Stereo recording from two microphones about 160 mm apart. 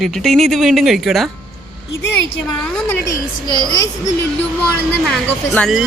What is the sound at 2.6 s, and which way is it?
Speech, 5° left (ahead or behind).